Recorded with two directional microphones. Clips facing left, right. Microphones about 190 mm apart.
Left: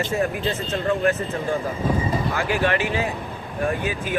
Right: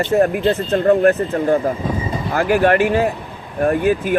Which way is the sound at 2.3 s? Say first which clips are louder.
Right 11 dB; 50° right (ahead or behind).